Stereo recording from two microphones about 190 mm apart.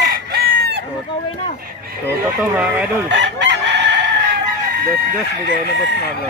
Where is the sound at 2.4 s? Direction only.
10° right (ahead or behind).